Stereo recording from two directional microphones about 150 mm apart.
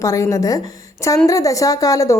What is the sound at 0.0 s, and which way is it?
A woman's voice, 20° left (ahead or behind).